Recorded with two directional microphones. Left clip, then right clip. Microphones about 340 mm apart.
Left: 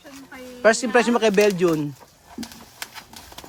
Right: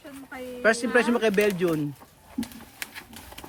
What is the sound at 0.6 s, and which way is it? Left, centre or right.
Speech, centre.